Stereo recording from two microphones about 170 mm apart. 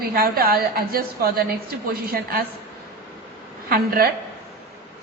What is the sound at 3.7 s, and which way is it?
Speech, 60° right (ahead or behind).